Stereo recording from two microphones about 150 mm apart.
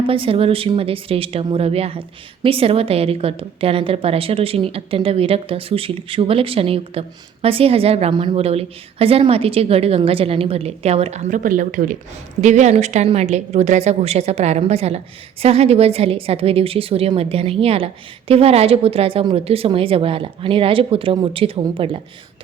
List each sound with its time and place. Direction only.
0.0 s speech: 35° right (ahead or behind); by 11.9 s 65° right (ahead or behind)
12.4 s a woman's voice: 50° right (ahead or behind)